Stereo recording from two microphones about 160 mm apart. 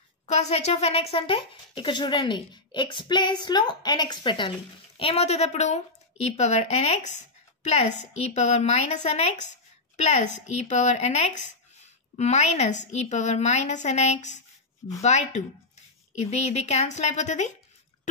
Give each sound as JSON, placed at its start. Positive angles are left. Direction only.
{"t": 0.3, "sound": "a woman's voice", "side_deg": 45}